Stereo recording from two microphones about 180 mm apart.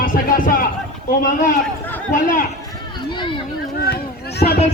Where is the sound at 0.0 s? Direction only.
50° left (ahead or behind).